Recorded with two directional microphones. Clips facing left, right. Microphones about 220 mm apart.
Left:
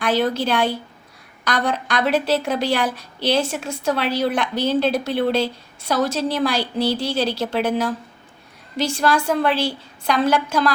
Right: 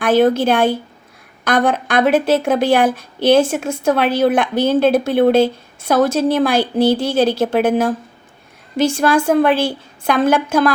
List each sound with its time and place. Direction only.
0.0 s a woman's voice: 50° right (ahead or behind)